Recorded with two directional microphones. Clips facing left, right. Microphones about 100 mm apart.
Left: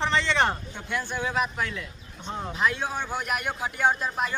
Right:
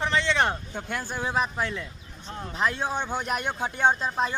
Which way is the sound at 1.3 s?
30° right (ahead or behind).